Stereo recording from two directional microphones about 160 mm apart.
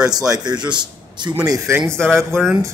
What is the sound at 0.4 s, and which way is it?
A man's voice, 25° right (ahead or behind).